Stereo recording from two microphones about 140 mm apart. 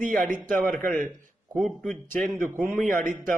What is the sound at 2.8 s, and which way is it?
Speech, 65° right (ahead or behind).